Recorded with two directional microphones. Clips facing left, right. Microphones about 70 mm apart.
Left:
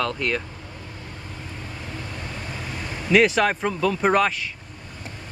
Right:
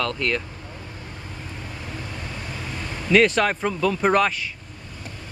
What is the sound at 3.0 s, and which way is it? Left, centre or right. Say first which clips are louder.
Speech: even; centre.